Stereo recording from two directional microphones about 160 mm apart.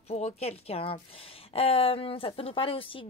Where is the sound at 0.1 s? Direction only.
40° left (ahead or behind).